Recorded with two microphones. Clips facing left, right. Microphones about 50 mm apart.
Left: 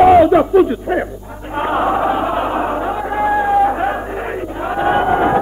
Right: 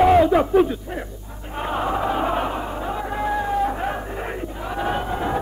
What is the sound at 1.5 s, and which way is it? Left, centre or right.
Music, left.